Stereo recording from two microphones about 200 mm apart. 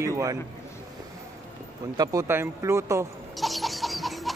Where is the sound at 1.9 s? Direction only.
15° right (ahead or behind).